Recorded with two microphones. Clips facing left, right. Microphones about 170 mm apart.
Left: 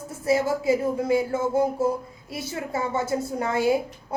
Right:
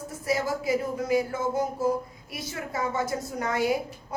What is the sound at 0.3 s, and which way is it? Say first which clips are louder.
A woman's voice: left 5 dB; 25° left (ahead or behind).